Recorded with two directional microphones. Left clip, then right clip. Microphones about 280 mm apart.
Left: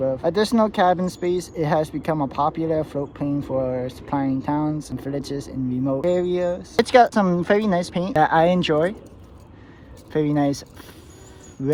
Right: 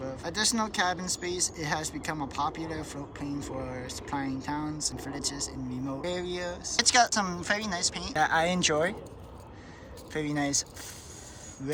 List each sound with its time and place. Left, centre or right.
0.0 s speech: centre
10.1 s speech: centre